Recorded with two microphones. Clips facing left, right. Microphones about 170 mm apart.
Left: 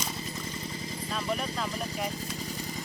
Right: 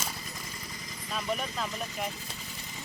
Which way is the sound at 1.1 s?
Centre (ahead or behind).